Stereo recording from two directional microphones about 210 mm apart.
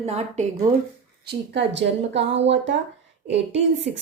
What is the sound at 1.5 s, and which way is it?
A woman's voice, 55° right (ahead or behind).